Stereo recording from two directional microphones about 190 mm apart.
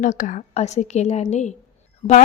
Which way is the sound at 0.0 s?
40° left (ahead or behind).